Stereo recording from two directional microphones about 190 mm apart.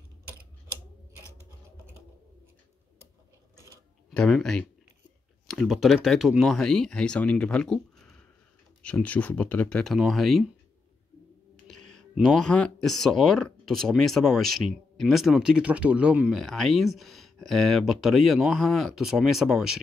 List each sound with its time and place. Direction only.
3.5 s a sound: 15° right (ahead or behind)
4.1 s speech: 5° left (ahead or behind)
11.6 s speech: 5° left (ahead or behind)